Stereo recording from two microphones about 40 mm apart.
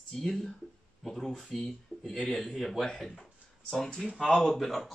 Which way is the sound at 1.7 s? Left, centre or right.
Left.